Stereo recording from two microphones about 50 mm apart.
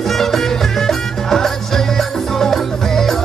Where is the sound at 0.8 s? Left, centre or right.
Centre.